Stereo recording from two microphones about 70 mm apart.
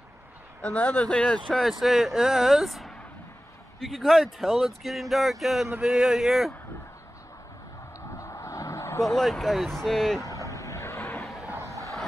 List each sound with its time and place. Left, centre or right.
0.6 s speech: centre
5.8 s speech: centre
8.2 s vehicle: left
9.0 s speech: centre
10.5 s vehicle: left
11.5 s a sound: right